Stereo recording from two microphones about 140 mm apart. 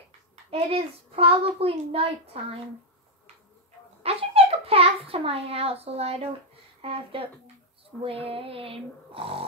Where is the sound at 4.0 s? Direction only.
45° right (ahead or behind).